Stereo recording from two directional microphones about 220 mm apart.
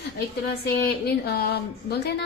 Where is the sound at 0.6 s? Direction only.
45° left (ahead or behind).